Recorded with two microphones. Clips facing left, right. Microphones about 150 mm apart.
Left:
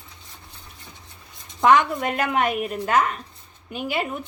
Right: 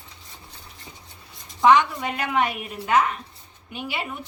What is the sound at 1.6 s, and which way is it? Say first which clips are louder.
A woman's voice: even; 50° left (ahead or behind).